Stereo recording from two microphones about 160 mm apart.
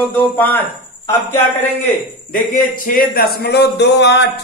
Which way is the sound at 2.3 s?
60° left (ahead or behind).